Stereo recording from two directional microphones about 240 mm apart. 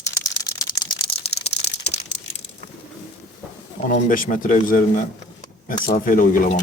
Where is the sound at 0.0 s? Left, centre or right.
Centre.